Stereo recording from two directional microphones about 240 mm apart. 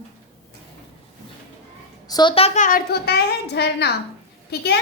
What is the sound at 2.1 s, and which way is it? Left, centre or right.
A child's voice, centre.